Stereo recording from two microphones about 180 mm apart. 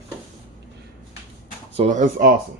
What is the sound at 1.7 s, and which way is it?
Speech, 40° right (ahead or behind).